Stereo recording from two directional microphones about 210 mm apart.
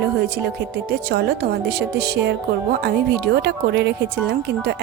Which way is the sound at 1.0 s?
50° right (ahead or behind).